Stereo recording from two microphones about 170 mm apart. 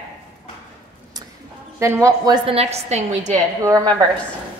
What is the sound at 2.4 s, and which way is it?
Speech, 35° right (ahead or behind).